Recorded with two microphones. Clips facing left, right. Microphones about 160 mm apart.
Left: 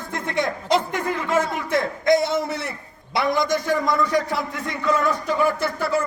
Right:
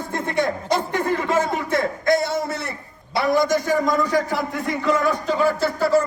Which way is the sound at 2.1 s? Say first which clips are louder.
Left 2 dB; 20° left (ahead or behind).